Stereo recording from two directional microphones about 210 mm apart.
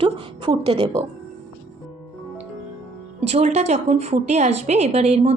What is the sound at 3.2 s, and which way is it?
A woman's voice, 30° right (ahead or behind).